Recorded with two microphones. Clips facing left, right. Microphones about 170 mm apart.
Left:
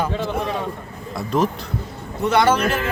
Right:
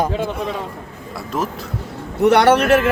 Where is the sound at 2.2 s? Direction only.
70° right (ahead or behind).